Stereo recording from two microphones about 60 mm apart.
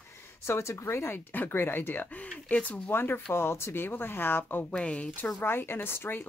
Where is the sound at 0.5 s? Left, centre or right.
Left.